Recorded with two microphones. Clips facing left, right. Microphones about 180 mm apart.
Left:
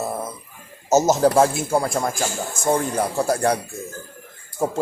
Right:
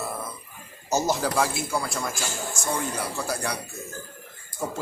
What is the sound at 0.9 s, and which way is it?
A man's voice, 45° left (ahead or behind).